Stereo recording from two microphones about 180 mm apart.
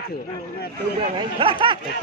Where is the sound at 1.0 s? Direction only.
30° right (ahead or behind).